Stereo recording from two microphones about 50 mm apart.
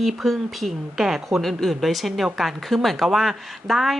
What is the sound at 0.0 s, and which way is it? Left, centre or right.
A woman's voice, centre.